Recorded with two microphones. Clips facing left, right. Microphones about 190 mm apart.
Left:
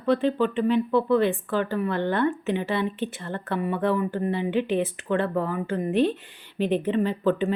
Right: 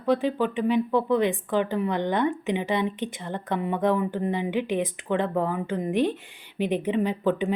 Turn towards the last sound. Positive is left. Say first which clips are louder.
# left 1 dB
turn(degrees=-15)  # may be behind; listen again after turning